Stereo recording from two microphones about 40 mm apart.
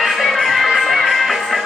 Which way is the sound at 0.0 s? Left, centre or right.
Centre.